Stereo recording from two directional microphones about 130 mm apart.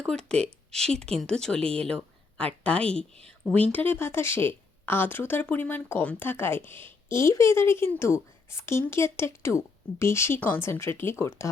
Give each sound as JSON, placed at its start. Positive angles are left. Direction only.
{"t": 0.0, "sound": "speech", "side_deg": 5}
{"t": 1.7, "sound": "a sound", "side_deg": 5}
{"t": 2.6, "sound": "a woman's voice", "side_deg": 10}